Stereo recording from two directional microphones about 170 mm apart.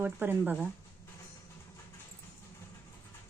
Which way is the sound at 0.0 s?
10° right (ahead or behind).